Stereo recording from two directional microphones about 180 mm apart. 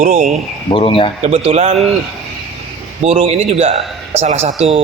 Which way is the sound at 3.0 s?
35° right (ahead or behind).